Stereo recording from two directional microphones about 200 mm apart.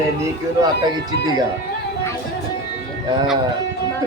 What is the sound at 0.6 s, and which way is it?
Speech, 20° right (ahead or behind).